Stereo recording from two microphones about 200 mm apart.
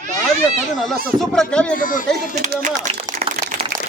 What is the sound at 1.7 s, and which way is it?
Speech, 45° left (ahead or behind).